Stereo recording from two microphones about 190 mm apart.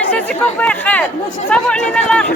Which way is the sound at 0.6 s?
10° left (ahead or behind).